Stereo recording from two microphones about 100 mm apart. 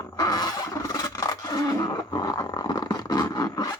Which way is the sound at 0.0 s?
40° left (ahead or behind).